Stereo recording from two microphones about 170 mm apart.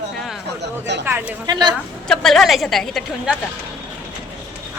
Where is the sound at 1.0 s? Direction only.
10° right (ahead or behind).